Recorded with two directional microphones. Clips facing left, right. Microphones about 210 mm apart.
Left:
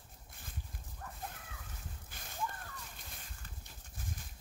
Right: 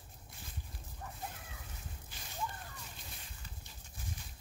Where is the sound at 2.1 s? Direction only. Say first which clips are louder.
Even; 55° left (ahead or behind).